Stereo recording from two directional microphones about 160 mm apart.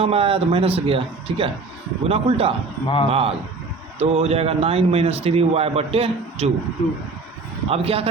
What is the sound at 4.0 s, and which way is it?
A man's voice, 40° right (ahead or behind).